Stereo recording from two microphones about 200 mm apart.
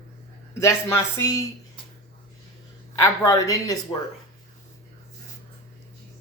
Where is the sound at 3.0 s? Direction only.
15° left (ahead or behind).